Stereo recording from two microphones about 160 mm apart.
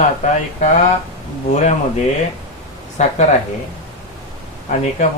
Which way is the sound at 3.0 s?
45° left (ahead or behind).